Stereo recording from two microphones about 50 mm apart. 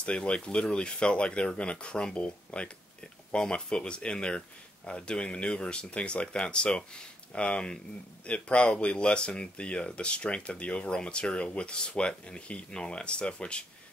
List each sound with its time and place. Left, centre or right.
0.0 s speech: left